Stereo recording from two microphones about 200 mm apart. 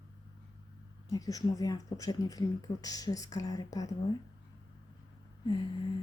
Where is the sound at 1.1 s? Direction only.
15° left (ahead or behind).